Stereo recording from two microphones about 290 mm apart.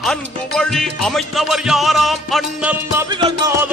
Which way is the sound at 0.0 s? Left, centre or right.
Centre.